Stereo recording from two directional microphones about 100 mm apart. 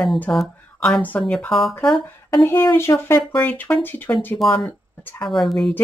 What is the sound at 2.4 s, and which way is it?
Speech, 30° left (ahead or behind).